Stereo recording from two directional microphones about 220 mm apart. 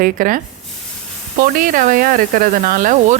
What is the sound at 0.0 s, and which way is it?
Speech, 40° right (ahead or behind).